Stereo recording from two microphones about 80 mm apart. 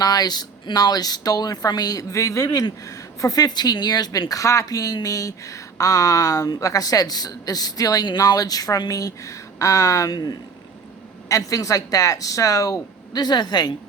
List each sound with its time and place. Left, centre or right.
0.0 s a woman's voice: left
2.5 s a woman's voice: left
11.3 s a woman's voice: left